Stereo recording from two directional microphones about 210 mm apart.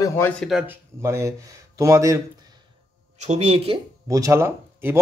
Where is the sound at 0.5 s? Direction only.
5° right (ahead or behind).